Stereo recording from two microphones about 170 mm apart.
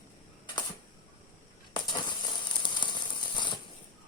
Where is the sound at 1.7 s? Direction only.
25° left (ahead or behind).